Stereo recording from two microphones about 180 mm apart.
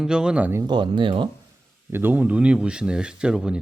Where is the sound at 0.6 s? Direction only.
25° right (ahead or behind).